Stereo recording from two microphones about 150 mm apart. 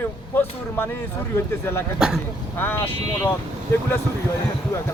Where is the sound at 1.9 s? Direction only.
5° right (ahead or behind).